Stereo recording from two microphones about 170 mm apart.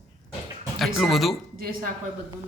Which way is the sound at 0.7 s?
Centre (ahead or behind).